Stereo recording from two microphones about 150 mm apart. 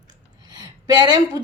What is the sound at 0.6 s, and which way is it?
Speech, 25° right (ahead or behind).